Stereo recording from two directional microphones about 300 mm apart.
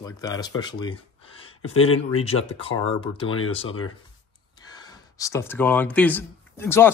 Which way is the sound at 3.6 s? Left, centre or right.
Left.